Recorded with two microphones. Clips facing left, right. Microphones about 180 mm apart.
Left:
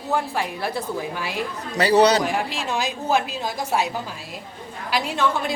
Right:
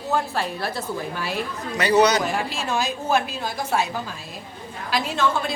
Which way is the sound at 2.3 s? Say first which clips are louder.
Even; 15° left (ahead or behind).